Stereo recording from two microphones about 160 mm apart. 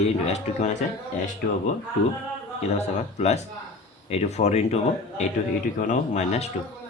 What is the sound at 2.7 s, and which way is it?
A man's voice, 45° left (ahead or behind).